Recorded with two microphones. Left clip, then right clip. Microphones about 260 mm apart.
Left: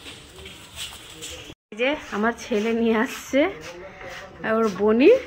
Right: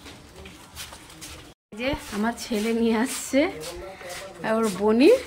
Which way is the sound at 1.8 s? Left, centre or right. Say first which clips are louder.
Left 5 dB; centre.